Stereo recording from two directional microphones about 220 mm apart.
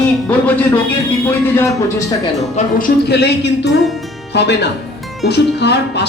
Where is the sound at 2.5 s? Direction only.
45° left (ahead or behind).